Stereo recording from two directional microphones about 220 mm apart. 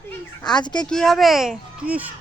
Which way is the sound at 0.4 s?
20° left (ahead or behind).